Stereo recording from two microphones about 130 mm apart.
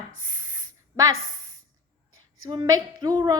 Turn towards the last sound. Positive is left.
turn(degrees=-30)  # may be behind; listen again after turning